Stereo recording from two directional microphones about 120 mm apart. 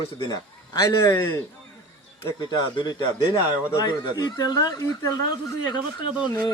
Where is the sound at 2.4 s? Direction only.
35° left (ahead or behind).